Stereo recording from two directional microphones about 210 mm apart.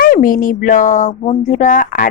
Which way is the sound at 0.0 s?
40° left (ahead or behind).